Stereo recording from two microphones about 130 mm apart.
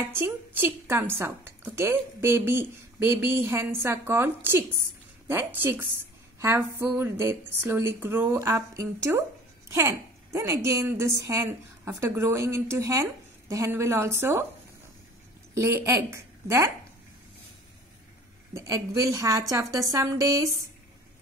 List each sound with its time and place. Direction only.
0.1 s a woman's voice: 15° right (ahead or behind)
15.5 s a woman's voice: 20° right (ahead or behind)
18.5 s a woman's voice: 25° right (ahead or behind)